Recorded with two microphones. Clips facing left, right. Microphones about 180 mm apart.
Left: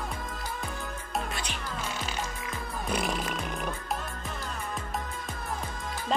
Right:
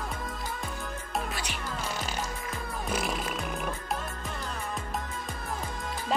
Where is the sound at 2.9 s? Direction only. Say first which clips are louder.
Left 1 dB; centre (ahead or behind).